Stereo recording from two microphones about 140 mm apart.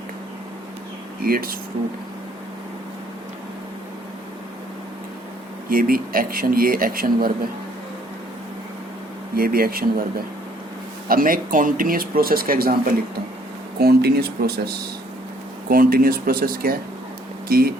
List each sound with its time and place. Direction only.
1.2 s speech: 90° right
5.6 s speech: 90° right
9.3 s speech: 90° right
11.1 s speech: 85° right
15.7 s speech: 90° right